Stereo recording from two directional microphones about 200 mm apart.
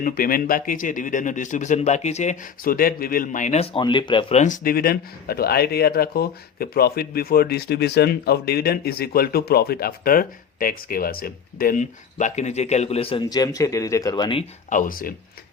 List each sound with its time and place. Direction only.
0.0 s speech: 45° left (ahead or behind); by 14.4 s 25° left (ahead or behind)
14.7 s speech: 40° left (ahead or behind)